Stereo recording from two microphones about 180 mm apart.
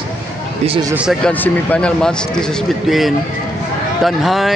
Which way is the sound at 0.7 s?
20° right (ahead or behind).